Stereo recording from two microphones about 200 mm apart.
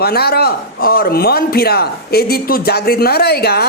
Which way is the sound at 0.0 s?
50° left (ahead or behind).